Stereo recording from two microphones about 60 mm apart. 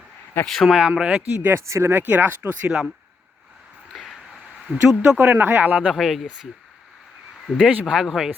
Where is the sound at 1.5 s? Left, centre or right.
Right.